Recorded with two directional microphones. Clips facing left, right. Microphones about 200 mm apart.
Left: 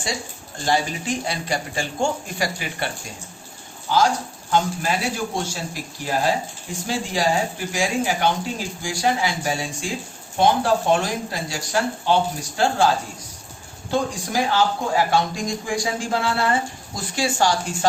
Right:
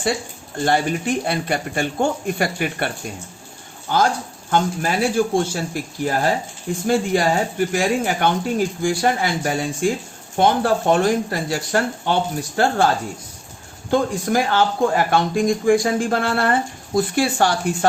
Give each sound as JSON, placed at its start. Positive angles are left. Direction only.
{"t": 0.6, "sound": "a man's voice", "side_deg": -55}
{"t": 13.9, "sound": "speech", "side_deg": -55}